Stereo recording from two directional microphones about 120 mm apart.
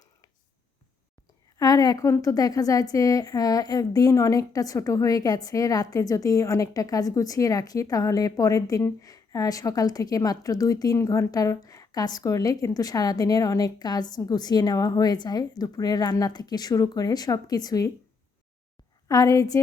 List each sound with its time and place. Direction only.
1.5 s a woman's voice: 30° left (ahead or behind)
19.0 s a woman's voice: 25° left (ahead or behind)